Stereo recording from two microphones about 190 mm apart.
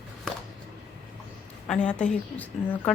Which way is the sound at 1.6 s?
5° left (ahead or behind).